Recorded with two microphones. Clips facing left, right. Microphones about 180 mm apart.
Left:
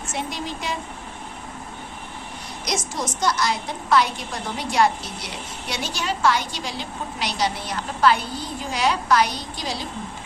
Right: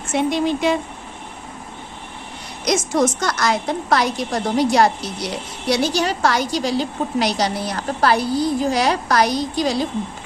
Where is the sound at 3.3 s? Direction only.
45° right (ahead or behind).